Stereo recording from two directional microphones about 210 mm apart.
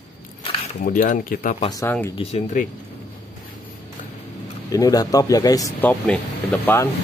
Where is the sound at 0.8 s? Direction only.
40° left (ahead or behind).